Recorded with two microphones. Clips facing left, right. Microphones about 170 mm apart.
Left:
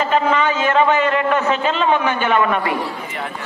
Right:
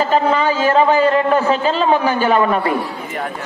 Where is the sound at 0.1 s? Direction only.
35° right (ahead or behind).